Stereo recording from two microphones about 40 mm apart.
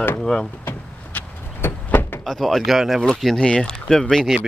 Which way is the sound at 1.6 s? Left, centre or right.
Left.